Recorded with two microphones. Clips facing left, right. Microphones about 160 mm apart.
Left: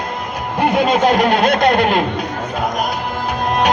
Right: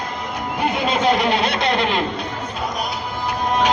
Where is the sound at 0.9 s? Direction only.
45° left (ahead or behind).